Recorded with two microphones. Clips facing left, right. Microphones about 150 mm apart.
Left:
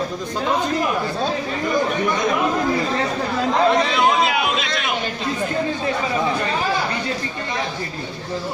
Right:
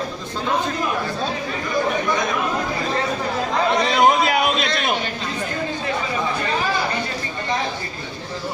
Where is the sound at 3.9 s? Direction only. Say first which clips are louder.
Right 2 dB; 40° right (ahead or behind).